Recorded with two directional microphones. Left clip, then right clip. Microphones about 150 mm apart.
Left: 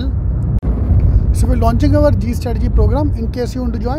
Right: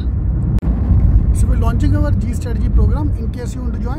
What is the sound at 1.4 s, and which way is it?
Speech, 30° left (ahead or behind).